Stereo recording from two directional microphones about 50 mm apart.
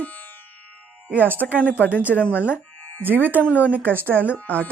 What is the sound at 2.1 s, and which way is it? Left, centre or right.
Speech, left.